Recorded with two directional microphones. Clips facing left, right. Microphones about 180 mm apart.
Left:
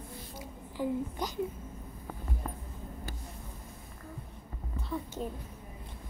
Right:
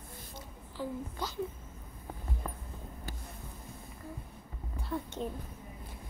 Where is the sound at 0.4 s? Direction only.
15° left (ahead or behind).